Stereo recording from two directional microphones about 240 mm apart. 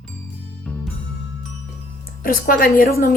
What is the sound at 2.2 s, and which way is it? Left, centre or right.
Speech, left.